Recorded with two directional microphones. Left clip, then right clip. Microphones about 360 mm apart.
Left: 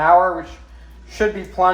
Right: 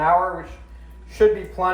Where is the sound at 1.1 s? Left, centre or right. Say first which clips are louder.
Right 1 dB; left.